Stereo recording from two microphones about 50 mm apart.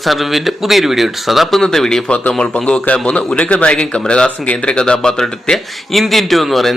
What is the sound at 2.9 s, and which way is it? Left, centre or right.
Speech, left.